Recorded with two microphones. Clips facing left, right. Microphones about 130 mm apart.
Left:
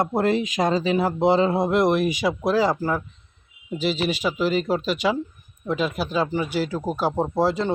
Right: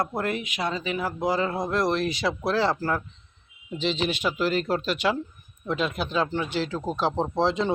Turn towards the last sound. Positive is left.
turn(degrees=5)  # may be behind; listen again after turning